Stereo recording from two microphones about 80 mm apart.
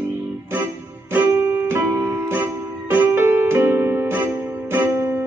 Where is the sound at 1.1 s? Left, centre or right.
Right.